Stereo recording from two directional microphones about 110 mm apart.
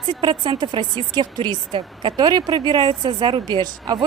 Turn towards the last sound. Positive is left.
turn(degrees=-40)  # may be behind; listen again after turning